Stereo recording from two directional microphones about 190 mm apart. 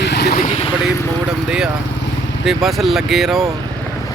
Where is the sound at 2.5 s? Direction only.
Centre (ahead or behind).